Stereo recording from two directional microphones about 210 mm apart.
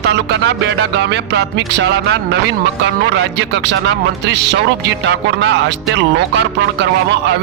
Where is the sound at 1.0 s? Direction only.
55° right (ahead or behind).